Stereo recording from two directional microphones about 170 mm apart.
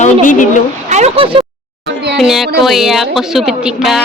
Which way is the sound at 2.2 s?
Centre (ahead or behind).